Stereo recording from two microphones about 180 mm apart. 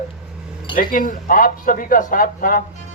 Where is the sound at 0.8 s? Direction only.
50° left (ahead or behind).